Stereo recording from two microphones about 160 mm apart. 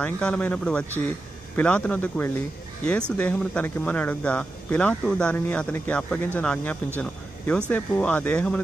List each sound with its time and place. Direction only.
0.0 s speech: 5° left (ahead or behind)